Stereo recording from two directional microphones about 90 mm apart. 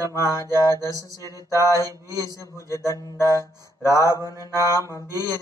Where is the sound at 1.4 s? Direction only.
35° right (ahead or behind).